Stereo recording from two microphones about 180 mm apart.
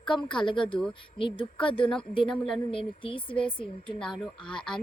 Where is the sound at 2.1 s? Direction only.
30° left (ahead or behind).